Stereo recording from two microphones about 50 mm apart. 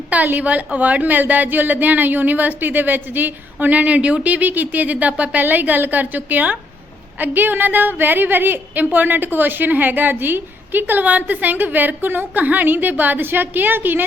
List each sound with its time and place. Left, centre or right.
0.1 s a woman's voice: right